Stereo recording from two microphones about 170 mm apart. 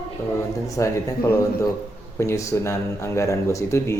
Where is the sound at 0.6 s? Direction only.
20° left (ahead or behind).